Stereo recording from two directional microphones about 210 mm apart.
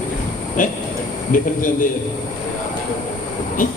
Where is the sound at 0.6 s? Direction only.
40° left (ahead or behind).